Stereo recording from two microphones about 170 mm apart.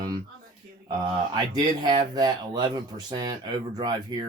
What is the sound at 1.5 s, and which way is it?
Speech, 25° right (ahead or behind).